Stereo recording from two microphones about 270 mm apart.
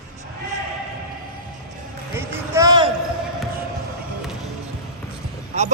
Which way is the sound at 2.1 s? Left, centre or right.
Centre.